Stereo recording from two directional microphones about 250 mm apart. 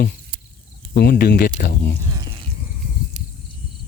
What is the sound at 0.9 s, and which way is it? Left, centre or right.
Speech, left.